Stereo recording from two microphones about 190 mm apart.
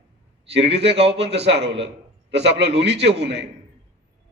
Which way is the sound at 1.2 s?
65° right (ahead or behind).